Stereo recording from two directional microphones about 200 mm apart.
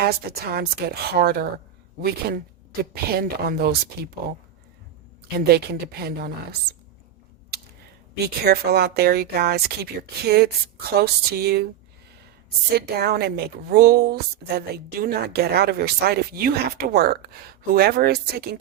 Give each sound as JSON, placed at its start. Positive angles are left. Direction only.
{"t": 0.0, "sound": "a woman's voice", "side_deg": -50}
{"t": 5.5, "sound": "a woman's voice", "side_deg": -55}
{"t": 8.2, "sound": "a woman's voice", "side_deg": -50}
{"t": 12.7, "sound": "a woman's voice", "side_deg": -50}